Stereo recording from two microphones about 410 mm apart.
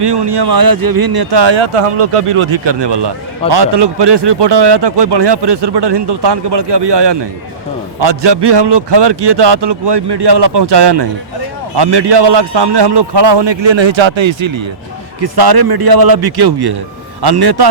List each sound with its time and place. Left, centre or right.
0.0 s a man's voice: right
15.2 s speech: right